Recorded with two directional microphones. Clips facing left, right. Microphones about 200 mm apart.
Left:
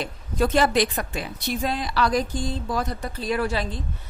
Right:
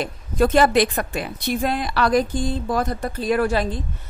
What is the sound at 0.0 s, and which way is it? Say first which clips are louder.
A woman's voice: right 4 dB; 50° right (ahead or behind).